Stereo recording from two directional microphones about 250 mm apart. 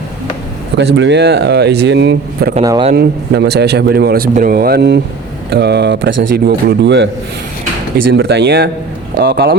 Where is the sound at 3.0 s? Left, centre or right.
Right.